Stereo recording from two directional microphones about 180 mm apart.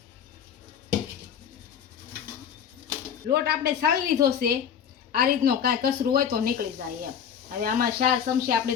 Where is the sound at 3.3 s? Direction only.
65° right (ahead or behind).